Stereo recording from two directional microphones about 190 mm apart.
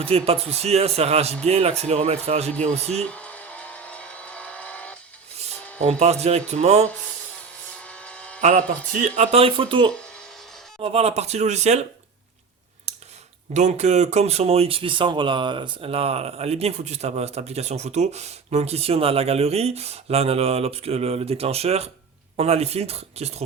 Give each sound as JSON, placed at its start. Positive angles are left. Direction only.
{"t": 0.0, "sound": "speech", "side_deg": -30}
{"t": 3.0, "sound": "vehicle", "side_deg": 5}
{"t": 5.8, "sound": "speech", "side_deg": -35}
{"t": 7.9, "sound": "a sound", "side_deg": 5}
{"t": 8.4, "sound": "speech", "side_deg": -40}
{"t": 13.5, "sound": "speech", "side_deg": -35}